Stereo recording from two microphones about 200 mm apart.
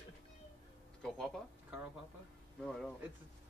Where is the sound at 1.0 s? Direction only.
5° left (ahead or behind).